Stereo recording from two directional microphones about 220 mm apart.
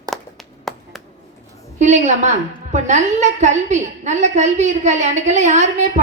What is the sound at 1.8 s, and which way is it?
A woman's voice, 35° right (ahead or behind).